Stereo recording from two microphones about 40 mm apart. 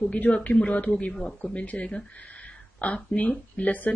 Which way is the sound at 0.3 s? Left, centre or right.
Left.